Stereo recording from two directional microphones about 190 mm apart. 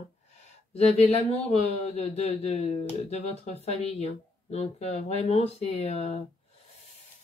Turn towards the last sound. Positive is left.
turn(degrees=35)  # may be behind; listen again after turning